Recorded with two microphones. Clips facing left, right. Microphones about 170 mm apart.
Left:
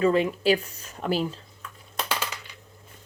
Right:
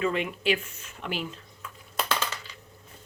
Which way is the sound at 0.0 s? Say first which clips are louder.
Left 6 dB; 35° left (ahead or behind).